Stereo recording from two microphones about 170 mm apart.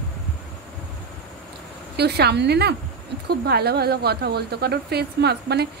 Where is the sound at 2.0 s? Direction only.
75° right (ahead or behind).